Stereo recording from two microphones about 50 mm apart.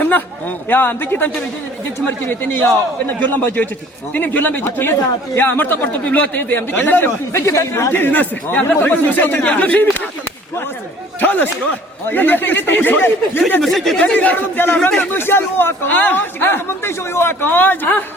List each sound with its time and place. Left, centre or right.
0.0 s a man's voice: left
7.3 s speech: left
7.9 s a man's voice: left
11.2 s a man's voice: left
13.6 s speech: centre
14.2 s a man's voice: left
14.8 s speech: left
15.1 s a man's voice: left